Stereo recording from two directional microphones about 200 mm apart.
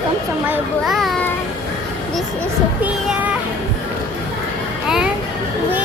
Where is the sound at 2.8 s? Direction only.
5° right (ahead or behind).